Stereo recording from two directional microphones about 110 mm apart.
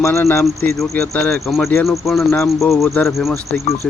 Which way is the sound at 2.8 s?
25° left (ahead or behind).